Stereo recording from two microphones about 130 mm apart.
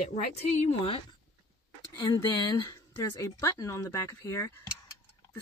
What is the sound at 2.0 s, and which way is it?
Speech, 30° left (ahead or behind).